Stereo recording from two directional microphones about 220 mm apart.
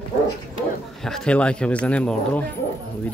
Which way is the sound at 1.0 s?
5° left (ahead or behind).